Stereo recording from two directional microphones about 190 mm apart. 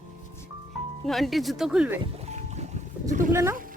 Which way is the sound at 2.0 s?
35° right (ahead or behind).